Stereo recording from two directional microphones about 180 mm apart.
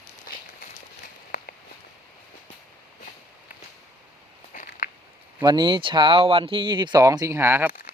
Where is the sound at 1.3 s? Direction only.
50° left (ahead or behind).